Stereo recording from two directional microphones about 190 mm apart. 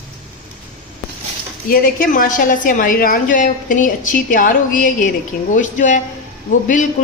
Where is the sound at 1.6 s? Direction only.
50° left (ahead or behind).